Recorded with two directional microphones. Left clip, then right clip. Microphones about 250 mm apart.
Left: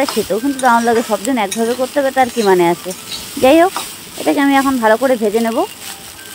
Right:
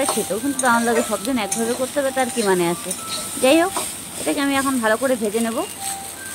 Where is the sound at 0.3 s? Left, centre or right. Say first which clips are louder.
Left 8 dB; left.